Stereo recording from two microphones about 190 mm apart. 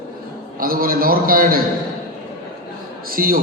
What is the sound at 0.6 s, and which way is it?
A man's voice, 50° right (ahead or behind).